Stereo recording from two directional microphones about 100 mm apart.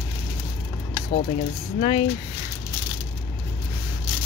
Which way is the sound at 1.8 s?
65° left (ahead or behind).